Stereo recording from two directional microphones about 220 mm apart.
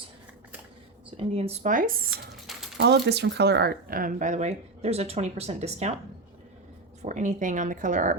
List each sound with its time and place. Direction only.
1.1 s speech: 25° right (ahead or behind)
2.0 s typing: centre (ahead or behind)
2.7 s speech: 50° right (ahead or behind); by 5.9 s 30° right (ahead or behind)
7.0 s speech: 35° right (ahead or behind)